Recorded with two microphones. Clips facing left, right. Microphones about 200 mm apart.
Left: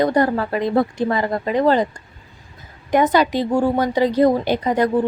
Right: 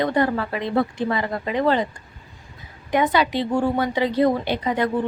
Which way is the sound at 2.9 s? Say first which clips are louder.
Left 4 dB; 45° left (ahead or behind).